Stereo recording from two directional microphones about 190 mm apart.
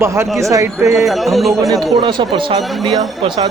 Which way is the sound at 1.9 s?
25° right (ahead or behind).